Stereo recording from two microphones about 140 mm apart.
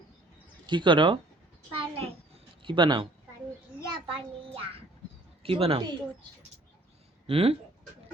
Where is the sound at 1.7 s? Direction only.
40° right (ahead or behind).